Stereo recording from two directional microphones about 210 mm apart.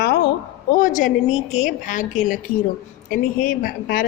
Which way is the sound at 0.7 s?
40° left (ahead or behind).